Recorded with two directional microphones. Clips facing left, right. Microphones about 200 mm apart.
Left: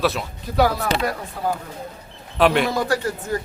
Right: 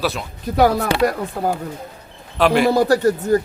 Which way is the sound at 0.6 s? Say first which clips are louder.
Right 4 dB; 50° right (ahead or behind).